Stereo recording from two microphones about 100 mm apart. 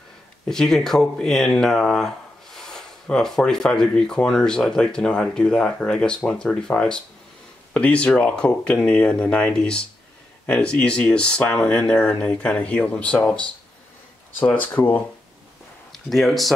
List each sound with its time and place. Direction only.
0.5 s speech: 5° left (ahead or behind)
14.5 s speech: 15° left (ahead or behind)
15.9 s speech: centre (ahead or behind)